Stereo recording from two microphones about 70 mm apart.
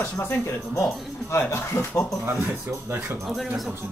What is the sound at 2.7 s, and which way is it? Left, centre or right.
Speech, right.